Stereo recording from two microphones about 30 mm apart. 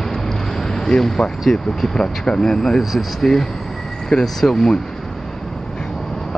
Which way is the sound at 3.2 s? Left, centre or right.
Centre.